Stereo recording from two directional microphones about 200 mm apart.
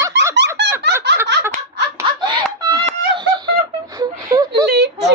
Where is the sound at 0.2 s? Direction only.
60° right (ahead or behind).